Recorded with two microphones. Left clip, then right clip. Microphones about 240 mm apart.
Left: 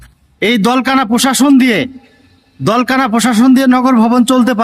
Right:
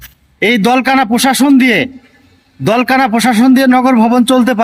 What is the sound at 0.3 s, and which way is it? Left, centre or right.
Speech, centre.